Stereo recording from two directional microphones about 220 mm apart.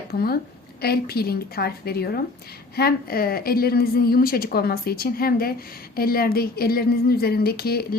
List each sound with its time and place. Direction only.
0.1 s a woman's voice: 45° left (ahead or behind)